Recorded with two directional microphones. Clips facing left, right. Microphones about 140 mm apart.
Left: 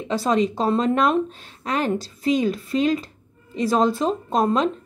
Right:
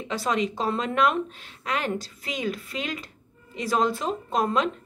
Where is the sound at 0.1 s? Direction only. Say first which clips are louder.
Left 6 dB; 35° left (ahead or behind).